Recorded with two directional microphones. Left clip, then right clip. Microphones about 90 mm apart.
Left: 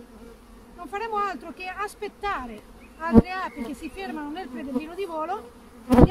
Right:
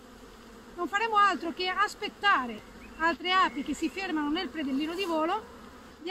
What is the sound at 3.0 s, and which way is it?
Speech, 25° left (ahead or behind).